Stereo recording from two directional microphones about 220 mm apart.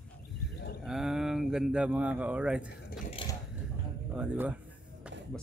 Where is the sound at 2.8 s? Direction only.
40° left (ahead or behind).